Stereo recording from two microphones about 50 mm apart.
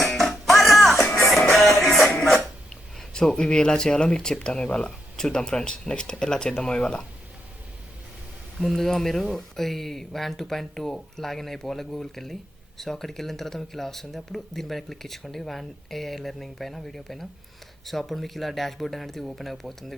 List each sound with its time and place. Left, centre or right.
0.0 s music: centre
2.2 s a sound: centre
4.4 s speech: centre
8.5 s speech: centre